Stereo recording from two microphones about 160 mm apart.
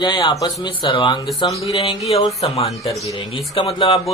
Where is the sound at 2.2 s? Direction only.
40° left (ahead or behind).